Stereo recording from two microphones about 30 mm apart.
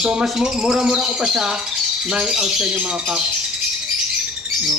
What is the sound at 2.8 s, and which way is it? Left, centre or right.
Speech, right.